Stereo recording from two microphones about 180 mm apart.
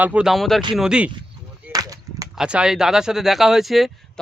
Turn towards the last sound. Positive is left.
turn(degrees=0)  # may be behind; listen again after turning